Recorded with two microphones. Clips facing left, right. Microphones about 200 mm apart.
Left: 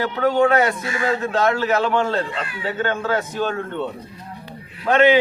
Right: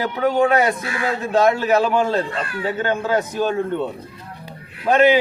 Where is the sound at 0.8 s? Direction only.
60° right (ahead or behind).